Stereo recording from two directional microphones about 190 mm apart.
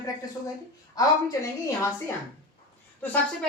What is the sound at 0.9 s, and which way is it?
Speech, 15° left (ahead or behind).